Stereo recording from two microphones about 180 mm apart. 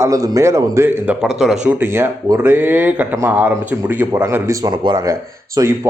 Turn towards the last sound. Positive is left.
turn(degrees=-20)  # may be behind; listen again after turning